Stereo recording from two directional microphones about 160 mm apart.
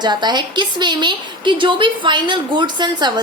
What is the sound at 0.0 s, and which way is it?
A woman's voice, 25° right (ahead or behind).